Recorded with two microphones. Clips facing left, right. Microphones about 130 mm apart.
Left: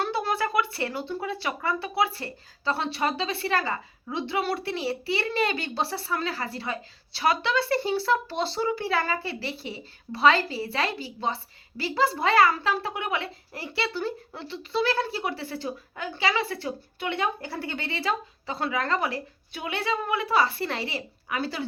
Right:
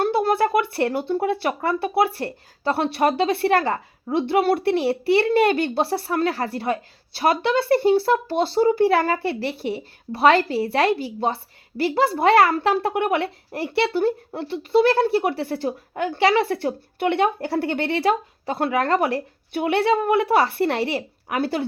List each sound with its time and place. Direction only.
0.0 s speech: 50° right (ahead or behind)